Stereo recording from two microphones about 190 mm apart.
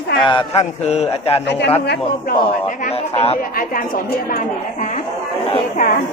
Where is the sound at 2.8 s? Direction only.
30° left (ahead or behind).